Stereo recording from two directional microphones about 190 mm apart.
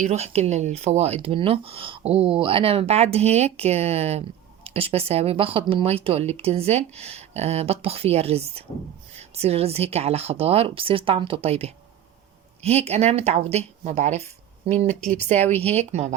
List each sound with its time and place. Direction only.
0.0 s speech: 35° right (ahead or behind)
15.4 s speech: 10° left (ahead or behind)
15.7 s speech: 35° right (ahead or behind)